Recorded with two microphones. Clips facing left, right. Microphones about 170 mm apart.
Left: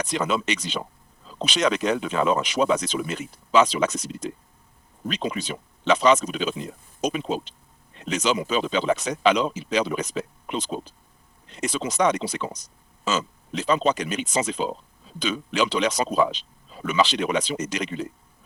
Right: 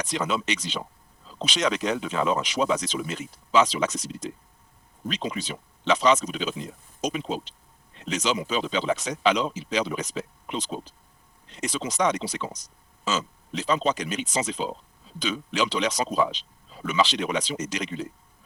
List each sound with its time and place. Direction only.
0.0 s speech: 55° left (ahead or behind)